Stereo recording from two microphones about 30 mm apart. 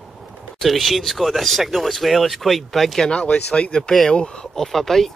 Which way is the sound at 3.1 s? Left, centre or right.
Left.